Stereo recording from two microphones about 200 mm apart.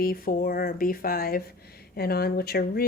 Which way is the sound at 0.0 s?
45° left (ahead or behind).